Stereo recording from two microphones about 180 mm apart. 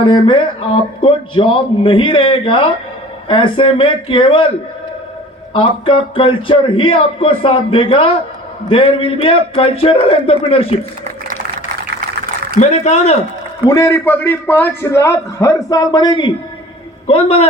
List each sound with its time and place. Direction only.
0.0 s a man's voice: 30° left (ahead or behind)
5.5 s a man's voice: 30° left (ahead or behind)
12.5 s a man's voice: 40° left (ahead or behind)
13.7 s a man's voice: 15° left (ahead or behind); by 17.5 s 30° left (ahead or behind)